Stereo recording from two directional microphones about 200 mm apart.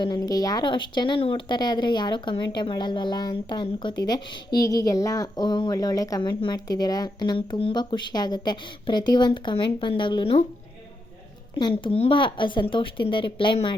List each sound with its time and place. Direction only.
0.0 s a woman's voice: 20° left (ahead or behind)
11.5 s a woman's voice: 25° left (ahead or behind)